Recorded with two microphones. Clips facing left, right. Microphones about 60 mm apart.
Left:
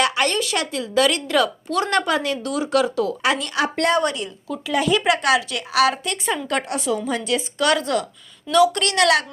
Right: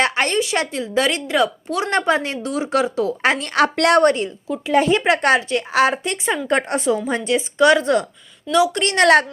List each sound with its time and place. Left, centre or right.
0.0 s a woman's voice: right
3.2 s speech: right
3.8 s a woman's voice: right
4.0 s speech: right
4.4 s a woman's voice: right
4.7 s a woman's voice: right